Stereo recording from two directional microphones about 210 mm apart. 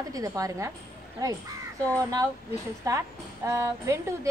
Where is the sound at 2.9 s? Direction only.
15° right (ahead or behind).